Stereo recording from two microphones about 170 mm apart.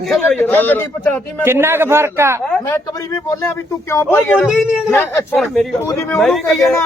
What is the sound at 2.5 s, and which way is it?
Speech, 10° left (ahead or behind).